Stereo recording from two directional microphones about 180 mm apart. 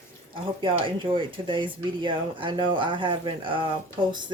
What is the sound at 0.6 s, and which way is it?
Speech, 30° right (ahead or behind).